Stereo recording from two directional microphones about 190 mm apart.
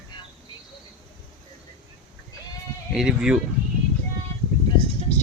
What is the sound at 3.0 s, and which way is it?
Speech, 5° right (ahead or behind).